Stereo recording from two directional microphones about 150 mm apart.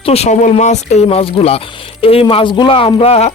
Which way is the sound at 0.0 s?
40° left (ahead or behind).